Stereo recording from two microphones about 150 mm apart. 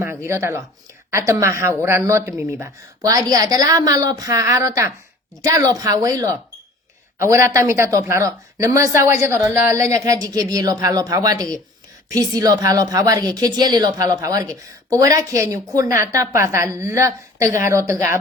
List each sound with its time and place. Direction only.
0.0 s a woman's voice: 15° right (ahead or behind)